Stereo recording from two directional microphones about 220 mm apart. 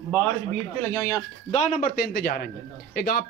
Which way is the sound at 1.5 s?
40° left (ahead or behind).